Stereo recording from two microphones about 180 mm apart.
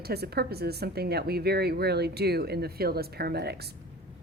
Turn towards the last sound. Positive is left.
turn(degrees=-65)  # may be behind; listen again after turning